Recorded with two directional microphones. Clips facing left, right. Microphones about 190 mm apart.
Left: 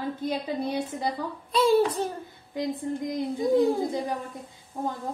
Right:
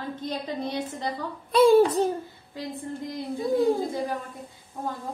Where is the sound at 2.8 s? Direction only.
15° left (ahead or behind).